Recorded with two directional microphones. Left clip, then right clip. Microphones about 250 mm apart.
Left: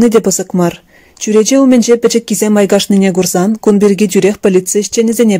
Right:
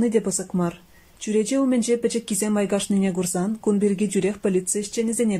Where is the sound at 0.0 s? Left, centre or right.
Left.